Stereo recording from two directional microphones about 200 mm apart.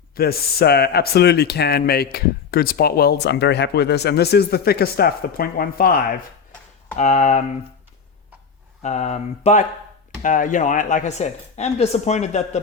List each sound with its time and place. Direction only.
0.2 s speech: 50° left (ahead or behind)
8.8 s speech: 35° left (ahead or behind)